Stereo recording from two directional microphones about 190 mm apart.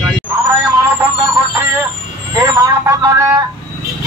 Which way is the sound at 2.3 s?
20° right (ahead or behind).